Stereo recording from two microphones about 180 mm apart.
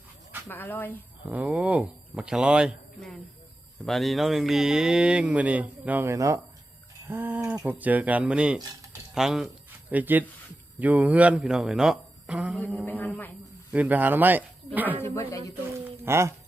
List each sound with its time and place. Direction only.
0.4 s a woman's voice: 10° left (ahead or behind)
1.3 s speech: 5° right (ahead or behind)
12.5 s a woman's voice: 10° left (ahead or behind)
13.7 s speech: 10° right (ahead or behind)
15.0 s a woman's voice: 15° left (ahead or behind)
15.8 s a sound: 15° right (ahead or behind)